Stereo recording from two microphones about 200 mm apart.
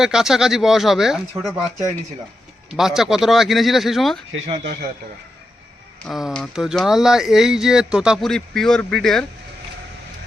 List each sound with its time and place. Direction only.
0.0 s speech: centre (ahead or behind)
2.6 s speech: centre (ahead or behind)
4.6 s a man's voice: 55° right (ahead or behind)
6.0 s speech: centre (ahead or behind)